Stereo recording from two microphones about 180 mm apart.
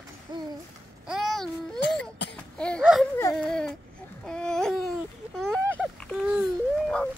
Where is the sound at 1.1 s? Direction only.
Centre (ahead or behind).